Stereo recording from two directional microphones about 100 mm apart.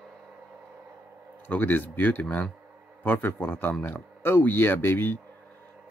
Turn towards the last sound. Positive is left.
turn(degrees=20)  # may be behind; listen again after turning